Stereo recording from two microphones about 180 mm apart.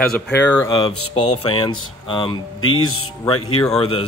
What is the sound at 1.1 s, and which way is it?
Speech, 35° left (ahead or behind).